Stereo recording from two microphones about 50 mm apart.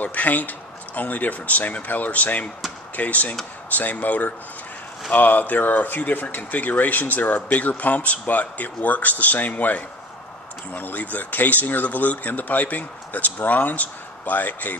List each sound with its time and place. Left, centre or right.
0.0 s speech: left